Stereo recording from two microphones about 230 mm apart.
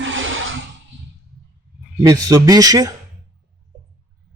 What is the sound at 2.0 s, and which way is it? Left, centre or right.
Speech, centre.